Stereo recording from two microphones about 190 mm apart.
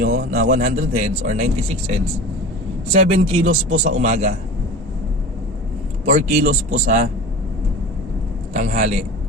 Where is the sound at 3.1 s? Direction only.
30° right (ahead or behind).